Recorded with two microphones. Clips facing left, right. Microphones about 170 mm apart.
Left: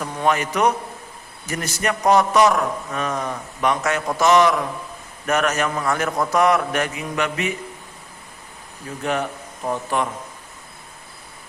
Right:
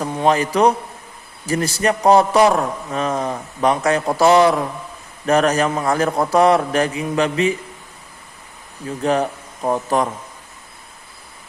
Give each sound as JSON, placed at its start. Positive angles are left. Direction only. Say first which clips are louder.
{"t": 0.0, "sound": "a man's voice", "louder": "right 4 dB", "side_deg": -30}
{"t": 9.0, "sound": "a man's voice", "louder": "right 5 dB", "side_deg": -35}